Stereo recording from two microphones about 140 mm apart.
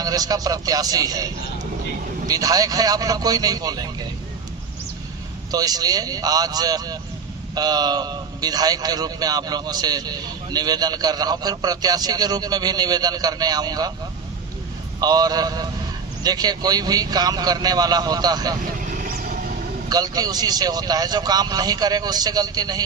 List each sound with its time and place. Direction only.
0.0 s a man's voice: 25° right (ahead or behind)
5.5 s a man's voice: 25° right (ahead or behind)
15.0 s a man's voice: 30° right (ahead or behind)
18.9 s vehicle: 80° right
19.9 s a man's voice: 25° right (ahead or behind)